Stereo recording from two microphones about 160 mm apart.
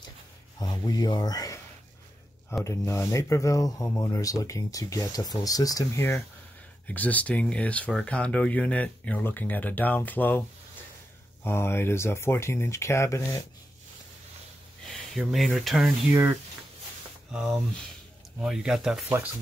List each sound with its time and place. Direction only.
0.6 s speech: 25° left (ahead or behind)
2.6 s speech: 15° left (ahead or behind)
11.4 s speech: 15° left (ahead or behind)
14.9 s speech: centre (ahead or behind)
16.1 s speech: 15° right (ahead or behind)